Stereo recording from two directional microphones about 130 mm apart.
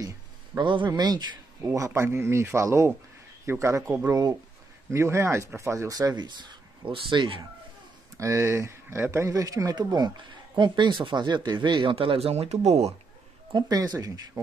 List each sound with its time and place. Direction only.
0.6 s speech: 35° right (ahead or behind)
1.9 s speech: 20° right (ahead or behind); by 7.4 s 40° right (ahead or behind)
8.2 s speech: 20° right (ahead or behind); by 12.9 s 55° right (ahead or behind)
13.5 s speech: 30° right (ahead or behind)